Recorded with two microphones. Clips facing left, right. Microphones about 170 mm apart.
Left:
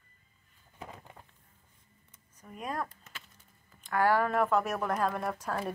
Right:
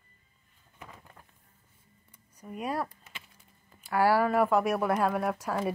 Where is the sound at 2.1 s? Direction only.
10° right (ahead or behind).